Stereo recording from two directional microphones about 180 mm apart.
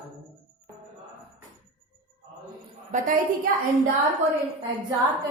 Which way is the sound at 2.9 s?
45° right (ahead or behind).